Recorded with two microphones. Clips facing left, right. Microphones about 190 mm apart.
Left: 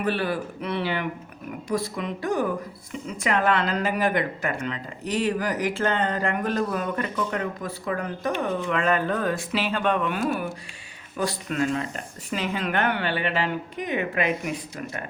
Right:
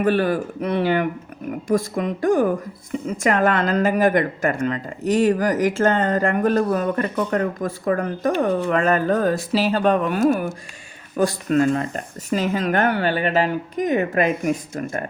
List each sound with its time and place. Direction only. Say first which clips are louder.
0.0 s speech: right 7 dB; 45° right (ahead or behind)